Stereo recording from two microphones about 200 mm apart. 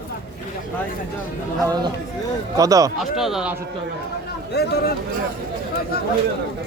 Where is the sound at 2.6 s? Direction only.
15° right (ahead or behind).